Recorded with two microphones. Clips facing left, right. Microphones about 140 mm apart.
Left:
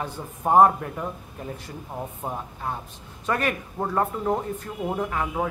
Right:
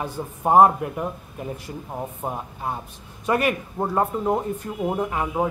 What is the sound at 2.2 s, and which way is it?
A man's voice, 15° right (ahead or behind).